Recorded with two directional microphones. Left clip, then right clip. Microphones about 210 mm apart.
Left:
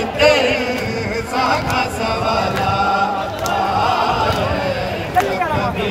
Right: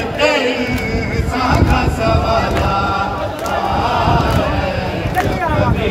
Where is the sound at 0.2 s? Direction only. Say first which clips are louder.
Left 2 dB; 50° left (ahead or behind).